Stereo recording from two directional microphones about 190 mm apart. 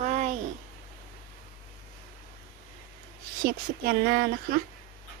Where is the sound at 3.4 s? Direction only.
50° right (ahead or behind).